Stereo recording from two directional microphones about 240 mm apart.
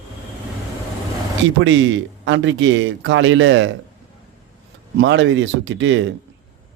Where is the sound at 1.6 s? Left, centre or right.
Right.